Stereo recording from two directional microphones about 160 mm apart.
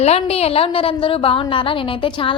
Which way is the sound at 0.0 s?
40° left (ahead or behind).